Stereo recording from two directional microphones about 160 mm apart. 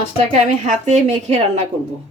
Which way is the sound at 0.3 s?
50° right (ahead or behind).